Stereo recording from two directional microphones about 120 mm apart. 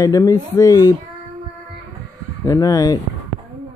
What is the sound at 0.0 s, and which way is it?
Speech, 30° left (ahead or behind).